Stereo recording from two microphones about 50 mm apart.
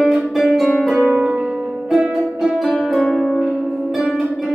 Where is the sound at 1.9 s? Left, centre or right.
Centre.